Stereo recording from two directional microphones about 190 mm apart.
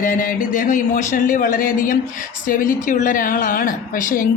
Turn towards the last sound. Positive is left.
turn(degrees=45)  # may be behind; listen again after turning